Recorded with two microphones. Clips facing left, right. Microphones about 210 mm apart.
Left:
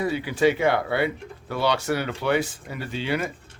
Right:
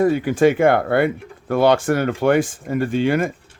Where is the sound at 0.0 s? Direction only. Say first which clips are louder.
Right 6 dB; 50° right (ahead or behind).